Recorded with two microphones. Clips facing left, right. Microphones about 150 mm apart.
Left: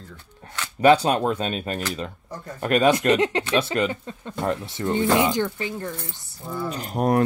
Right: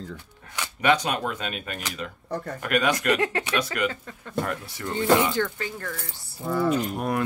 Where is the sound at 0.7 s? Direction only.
35° left (ahead or behind).